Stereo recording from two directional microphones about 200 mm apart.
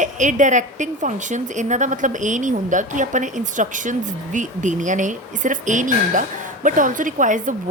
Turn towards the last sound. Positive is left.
turn(degrees=-40)  # may be behind; listen again after turning